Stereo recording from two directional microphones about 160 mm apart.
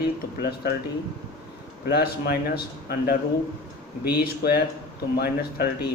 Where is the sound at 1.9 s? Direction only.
75° left (ahead or behind).